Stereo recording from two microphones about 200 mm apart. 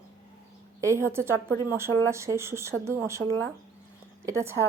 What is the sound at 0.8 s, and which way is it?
A woman's voice, 15° right (ahead or behind).